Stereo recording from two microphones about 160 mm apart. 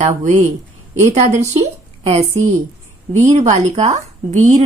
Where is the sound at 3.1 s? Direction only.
45° right (ahead or behind).